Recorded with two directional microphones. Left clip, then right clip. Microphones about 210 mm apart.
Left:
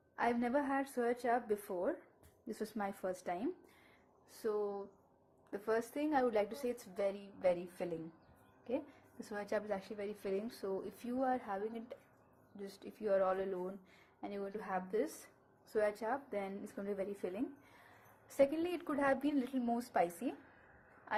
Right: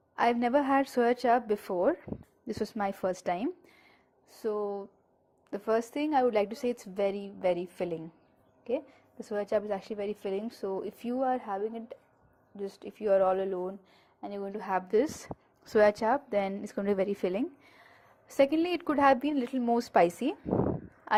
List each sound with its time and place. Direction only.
0.2 s a woman's voice: 30° right (ahead or behind)
14.6 s a woman's voice: 35° right (ahead or behind)